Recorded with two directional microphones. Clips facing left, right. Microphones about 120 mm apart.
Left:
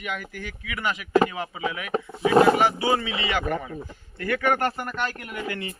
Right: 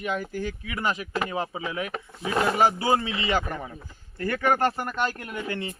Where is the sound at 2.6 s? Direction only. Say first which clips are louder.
Even; 35° right (ahead or behind).